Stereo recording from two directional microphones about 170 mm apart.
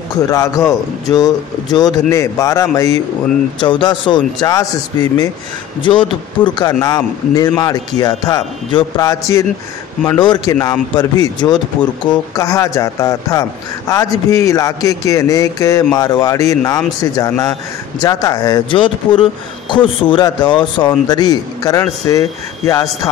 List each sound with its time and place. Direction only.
0.3 s a man's voice: 20° left (ahead or behind)
5.8 s a man's voice: 30° left (ahead or behind)